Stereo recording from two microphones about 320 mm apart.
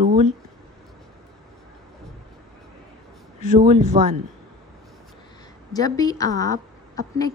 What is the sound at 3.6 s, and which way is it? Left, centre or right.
Speech, right.